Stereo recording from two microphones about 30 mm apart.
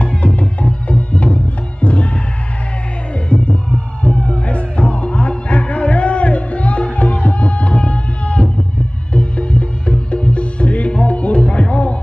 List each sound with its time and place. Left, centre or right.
0.0 s music: left
3.4 s a sound: left
4.5 s music: left